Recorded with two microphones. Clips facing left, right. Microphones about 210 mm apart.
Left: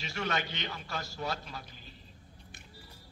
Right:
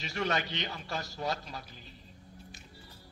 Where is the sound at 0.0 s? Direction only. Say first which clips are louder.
Right 2 dB; 35° right (ahead or behind).